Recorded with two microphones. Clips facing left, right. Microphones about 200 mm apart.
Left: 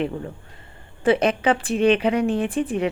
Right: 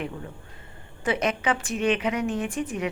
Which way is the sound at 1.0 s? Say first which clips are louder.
Left 7 dB; 30° left (ahead or behind).